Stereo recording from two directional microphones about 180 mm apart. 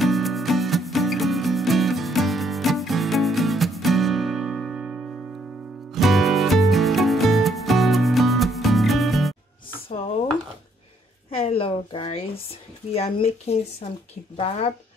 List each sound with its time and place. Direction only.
0.0 s music: centre (ahead or behind)
11.2 s a sound: 30° left (ahead or behind)
12.9 s speech: 35° left (ahead or behind)